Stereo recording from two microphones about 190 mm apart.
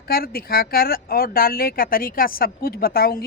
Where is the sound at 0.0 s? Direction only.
50° left (ahead or behind).